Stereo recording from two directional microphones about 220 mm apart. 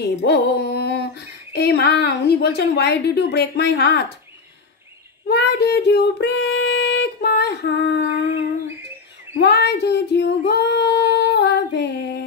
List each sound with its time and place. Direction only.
0.0 s speech: 50° left (ahead or behind)
5.3 s speech: 50° left (ahead or behind)
9.4 s female singing: 50° left (ahead or behind)